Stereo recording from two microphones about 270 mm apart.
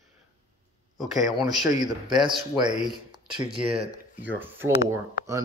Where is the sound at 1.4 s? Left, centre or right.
Centre.